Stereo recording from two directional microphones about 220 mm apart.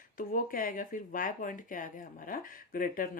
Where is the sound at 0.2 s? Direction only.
40° left (ahead or behind).